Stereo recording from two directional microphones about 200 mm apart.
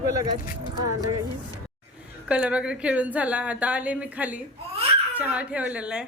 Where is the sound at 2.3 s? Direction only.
5° right (ahead or behind).